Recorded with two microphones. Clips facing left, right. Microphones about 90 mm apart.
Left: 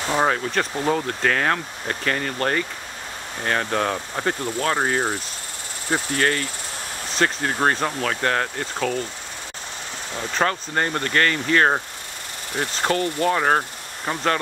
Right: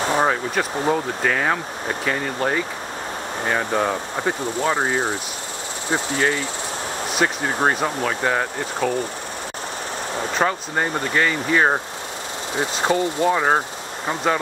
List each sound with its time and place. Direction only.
0.2 s speech: 5° right (ahead or behind)
10.3 s speech: 10° right (ahead or behind)